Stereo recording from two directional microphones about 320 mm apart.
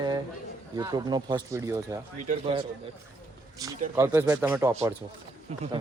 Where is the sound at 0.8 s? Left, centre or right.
Centre.